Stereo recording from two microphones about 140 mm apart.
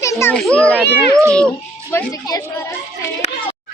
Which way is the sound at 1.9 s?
25° left (ahead or behind).